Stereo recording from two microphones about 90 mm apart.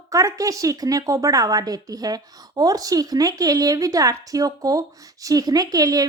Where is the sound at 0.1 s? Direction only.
40° right (ahead or behind).